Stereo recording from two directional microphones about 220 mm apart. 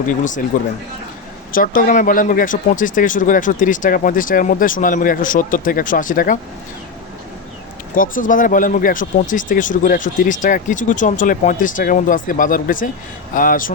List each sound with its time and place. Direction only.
0.1 s speech: 35° left (ahead or behind)
1.5 s speech: 40° left (ahead or behind)
7.9 s speech: 40° left (ahead or behind)